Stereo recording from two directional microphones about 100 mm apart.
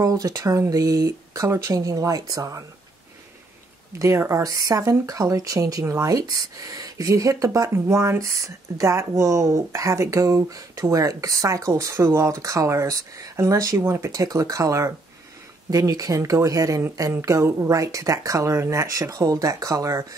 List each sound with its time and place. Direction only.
0.0 s speech: 35° right (ahead or behind)
4.0 s speech: 30° right (ahead or behind)